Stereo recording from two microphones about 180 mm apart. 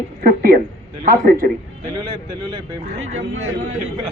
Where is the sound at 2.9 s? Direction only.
90° right.